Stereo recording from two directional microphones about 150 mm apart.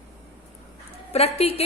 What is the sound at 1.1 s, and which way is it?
Speech, 40° left (ahead or behind).